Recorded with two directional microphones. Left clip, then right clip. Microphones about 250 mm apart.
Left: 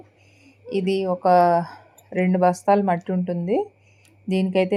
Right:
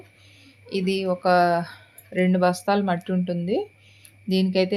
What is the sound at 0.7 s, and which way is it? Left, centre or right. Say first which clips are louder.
Speech: left 2 dB; centre.